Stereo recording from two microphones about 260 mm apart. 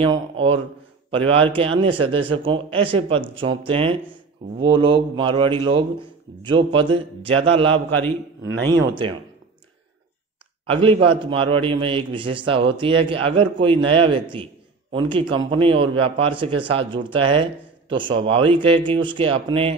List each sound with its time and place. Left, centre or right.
0.0 s speech: centre
10.7 s speech: right
14.3 s a sound: centre
15.1 s speech: centre